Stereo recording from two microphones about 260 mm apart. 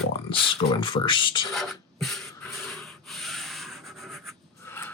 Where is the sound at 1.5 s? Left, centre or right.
Centre.